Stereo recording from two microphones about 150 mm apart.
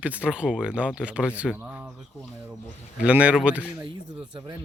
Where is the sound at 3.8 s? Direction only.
30° right (ahead or behind).